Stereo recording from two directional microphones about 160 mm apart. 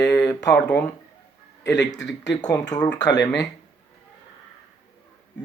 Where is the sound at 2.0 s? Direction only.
90° left.